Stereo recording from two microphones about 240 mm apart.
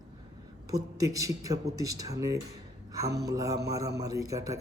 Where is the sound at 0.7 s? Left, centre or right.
Centre.